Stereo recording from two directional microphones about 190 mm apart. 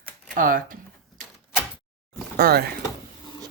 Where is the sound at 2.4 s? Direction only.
55° right (ahead or behind).